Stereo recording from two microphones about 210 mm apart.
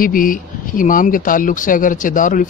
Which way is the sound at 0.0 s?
40° left (ahead or behind).